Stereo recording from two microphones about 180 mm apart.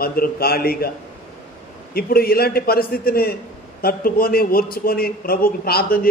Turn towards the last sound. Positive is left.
turn(degrees=55)  # may be behind; listen again after turning